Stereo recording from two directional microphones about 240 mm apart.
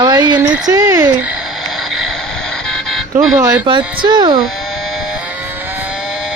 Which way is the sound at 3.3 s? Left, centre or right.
Centre.